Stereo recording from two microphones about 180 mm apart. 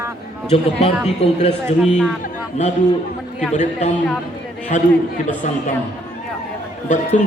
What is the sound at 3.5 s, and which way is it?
A man's voice, 40° left (ahead or behind).